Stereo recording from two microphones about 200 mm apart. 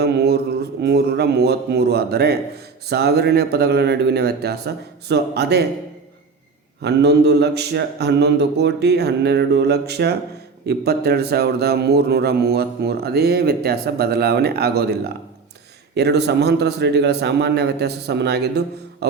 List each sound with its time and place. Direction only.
0.0 s a man's voice: 55° right (ahead or behind)
2.9 s mantra: 55° right (ahead or behind)
6.8 s mantra: 55° right (ahead or behind)
10.7 s a man's voice: 50° right (ahead or behind)
16.0 s mantra: 55° right (ahead or behind)